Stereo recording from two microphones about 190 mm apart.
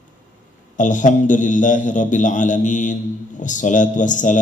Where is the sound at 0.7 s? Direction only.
40° left (ahead or behind).